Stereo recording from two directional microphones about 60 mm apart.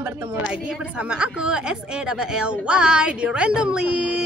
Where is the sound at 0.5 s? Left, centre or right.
Centre.